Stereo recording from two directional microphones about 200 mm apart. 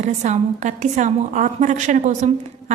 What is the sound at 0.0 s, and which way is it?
A woman's voice, 35° right (ahead or behind).